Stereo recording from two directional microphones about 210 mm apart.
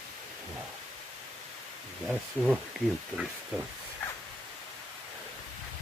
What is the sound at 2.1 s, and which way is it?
Speech, 5° right (ahead or behind).